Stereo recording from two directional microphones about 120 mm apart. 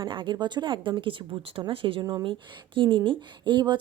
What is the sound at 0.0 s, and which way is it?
Speech, 45° right (ahead or behind).